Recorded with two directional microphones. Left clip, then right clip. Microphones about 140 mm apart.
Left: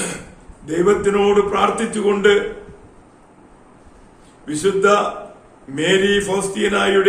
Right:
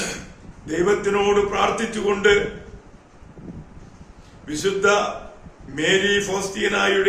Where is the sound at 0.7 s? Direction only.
15° left (ahead or behind).